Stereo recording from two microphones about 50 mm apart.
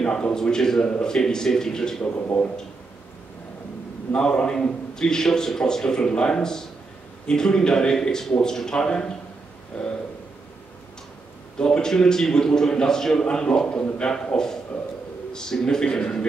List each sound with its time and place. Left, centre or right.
0.0 s a man's voice: centre
4.1 s a man's voice: centre
11.5 s a man's voice: centre